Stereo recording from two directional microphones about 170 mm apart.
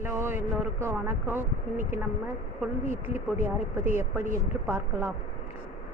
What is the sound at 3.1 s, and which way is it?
Speech, 15° right (ahead or behind).